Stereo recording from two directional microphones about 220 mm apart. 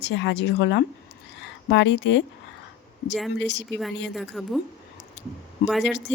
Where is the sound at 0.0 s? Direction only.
55° left (ahead or behind).